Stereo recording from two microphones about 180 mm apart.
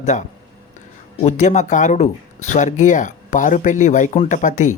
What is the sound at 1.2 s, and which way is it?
Speech, 40° left (ahead or behind).